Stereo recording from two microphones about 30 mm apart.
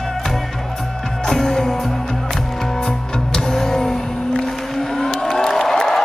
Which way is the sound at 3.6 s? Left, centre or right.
Centre.